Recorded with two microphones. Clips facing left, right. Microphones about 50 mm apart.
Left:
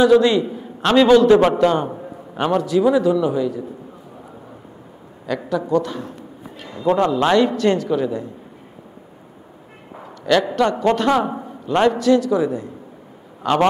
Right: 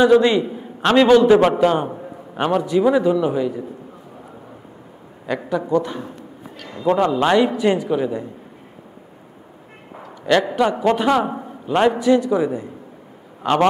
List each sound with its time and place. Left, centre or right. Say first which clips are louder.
0.0 s a man's voice: even; right
1.9 s a sound: even; centre
2.3 s a man's voice: even; centre
5.2 s a man's voice: even; right
10.2 s a man's voice: even; centre